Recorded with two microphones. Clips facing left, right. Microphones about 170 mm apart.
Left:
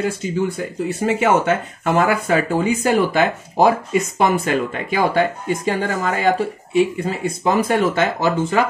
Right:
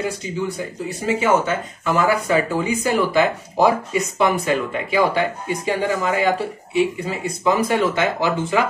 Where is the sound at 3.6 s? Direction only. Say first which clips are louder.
Left 2 dB; 50° left (ahead or behind).